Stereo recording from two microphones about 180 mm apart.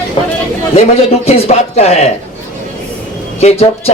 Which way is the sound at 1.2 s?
35° left (ahead or behind).